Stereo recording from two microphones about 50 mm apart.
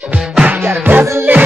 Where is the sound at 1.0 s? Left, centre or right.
Right.